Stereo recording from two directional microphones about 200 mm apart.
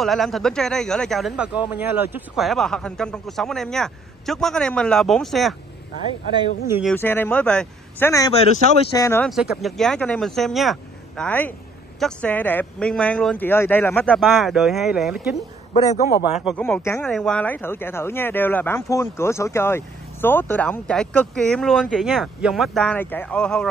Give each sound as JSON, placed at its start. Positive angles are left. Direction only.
{"t": 0.0, "sound": "a man's voice", "side_deg": 0}
{"t": 7.0, "sound": "speech", "side_deg": 10}
{"t": 9.3, "sound": "a man's voice", "side_deg": 0}
{"t": 15.7, "sound": "a man's voice", "side_deg": 35}
{"t": 16.3, "sound": "speech", "side_deg": 0}